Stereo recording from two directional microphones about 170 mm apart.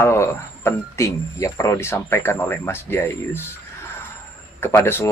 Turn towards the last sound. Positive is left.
turn(degrees=15)  # may be behind; listen again after turning